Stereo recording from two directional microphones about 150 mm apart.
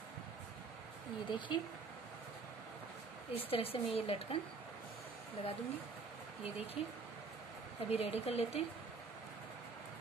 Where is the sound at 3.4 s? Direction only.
40° left (ahead or behind).